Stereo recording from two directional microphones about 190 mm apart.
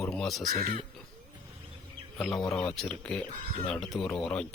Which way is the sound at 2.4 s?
Centre (ahead or behind).